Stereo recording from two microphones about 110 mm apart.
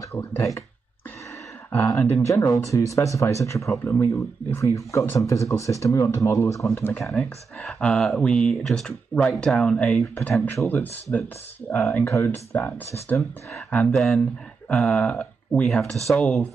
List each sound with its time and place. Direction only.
0.1 s speech: 25° left (ahead or behind)
1.9 s speech: 30° left (ahead or behind)
7.0 s speech: centre (ahead or behind)
11.9 s speech: 25° left (ahead or behind)
12.9 s speech: 25° left (ahead or behind)
13.8 s speech: centre (ahead or behind)